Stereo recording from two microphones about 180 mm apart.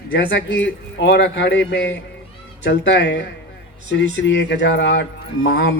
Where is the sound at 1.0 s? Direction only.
80° left.